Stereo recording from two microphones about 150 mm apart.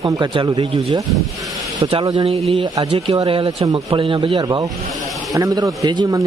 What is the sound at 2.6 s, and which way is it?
Speech, 25° right (ahead or behind).